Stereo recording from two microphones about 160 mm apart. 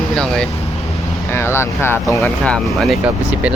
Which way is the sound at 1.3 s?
15° left (ahead or behind).